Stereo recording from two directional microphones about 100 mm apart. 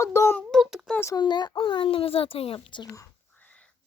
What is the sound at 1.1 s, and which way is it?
Speech, 45° left (ahead or behind).